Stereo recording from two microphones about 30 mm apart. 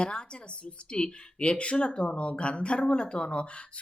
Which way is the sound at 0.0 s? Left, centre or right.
Left.